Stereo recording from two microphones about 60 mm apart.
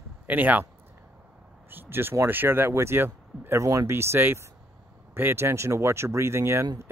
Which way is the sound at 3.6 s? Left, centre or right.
Right.